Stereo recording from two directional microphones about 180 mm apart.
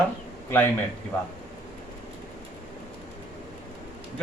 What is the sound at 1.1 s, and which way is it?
Speech, 10° left (ahead or behind).